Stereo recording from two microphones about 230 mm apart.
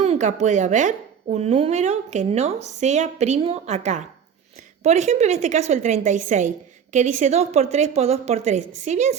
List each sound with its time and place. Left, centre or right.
0.0 s a woman's voice: right